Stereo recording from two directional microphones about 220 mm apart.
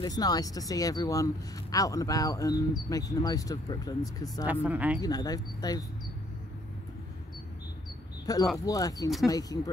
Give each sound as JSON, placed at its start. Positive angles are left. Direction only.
{"t": 0.0, "sound": "speech", "side_deg": 15}
{"t": 4.5, "sound": "speech", "side_deg": -5}
{"t": 5.0, "sound": "speech", "side_deg": 15}
{"t": 8.3, "sound": "speech", "side_deg": 15}